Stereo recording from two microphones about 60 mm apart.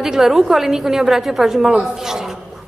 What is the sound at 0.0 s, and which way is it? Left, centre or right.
A woman's voice, centre.